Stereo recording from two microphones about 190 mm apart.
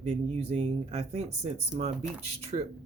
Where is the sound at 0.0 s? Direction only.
35° right (ahead or behind).